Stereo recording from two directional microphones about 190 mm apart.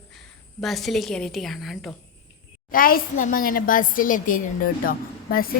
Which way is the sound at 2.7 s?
50° left (ahead or behind).